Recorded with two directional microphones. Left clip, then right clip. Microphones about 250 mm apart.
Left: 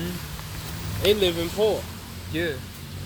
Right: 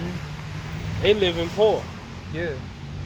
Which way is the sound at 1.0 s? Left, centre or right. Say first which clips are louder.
Right 1 dB; left.